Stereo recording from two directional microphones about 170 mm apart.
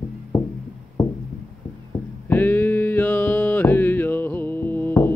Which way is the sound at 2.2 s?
10° left (ahead or behind).